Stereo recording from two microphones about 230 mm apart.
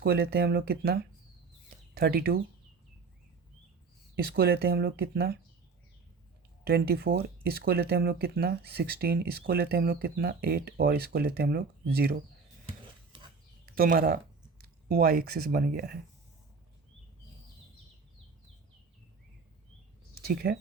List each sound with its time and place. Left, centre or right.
0.0 s speech: right
2.0 s speech: right
4.3 s speech: right
6.7 s speech: right
13.7 s speech: right
20.2 s speech: right